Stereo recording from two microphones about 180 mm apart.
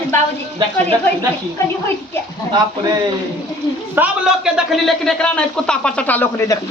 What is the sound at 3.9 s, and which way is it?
A man's voice, 5° right (ahead or behind).